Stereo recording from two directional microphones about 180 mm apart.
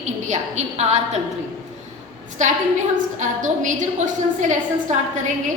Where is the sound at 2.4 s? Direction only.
40° right (ahead or behind).